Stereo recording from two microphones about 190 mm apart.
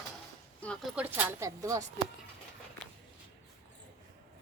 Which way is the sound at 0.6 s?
5° left (ahead or behind).